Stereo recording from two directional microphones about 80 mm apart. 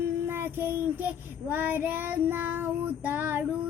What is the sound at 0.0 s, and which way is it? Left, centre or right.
Child singing, right.